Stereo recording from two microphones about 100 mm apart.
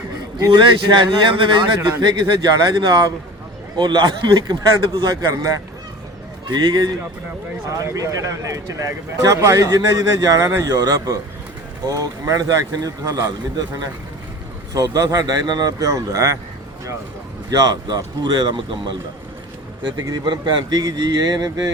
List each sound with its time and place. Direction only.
0.5 s a man's voice: 50° right (ahead or behind)
6.5 s a man's voice: 45° right (ahead or behind)
7.7 s speech: 35° right (ahead or behind)
14.7 s speech: 35° right (ahead or behind)
17.5 s a man's voice: 40° right (ahead or behind)
20.1 s speech: 45° right (ahead or behind)